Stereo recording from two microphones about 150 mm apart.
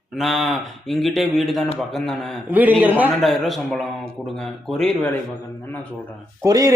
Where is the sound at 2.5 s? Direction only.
10° right (ahead or behind).